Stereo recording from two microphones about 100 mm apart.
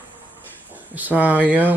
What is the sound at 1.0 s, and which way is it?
Speech, 15° right (ahead or behind).